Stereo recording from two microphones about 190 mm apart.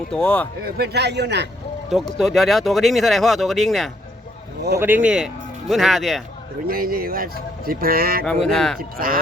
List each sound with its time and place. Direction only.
0.1 s speech: 5° left (ahead or behind)
0.6 s a man's voice: 60° right (ahead or behind)
2.1 s speech: centre (ahead or behind)
6.7 s speech: 50° right (ahead or behind)
8.2 s speech: 5° left (ahead or behind)
8.8 s speech: 50° right (ahead or behind)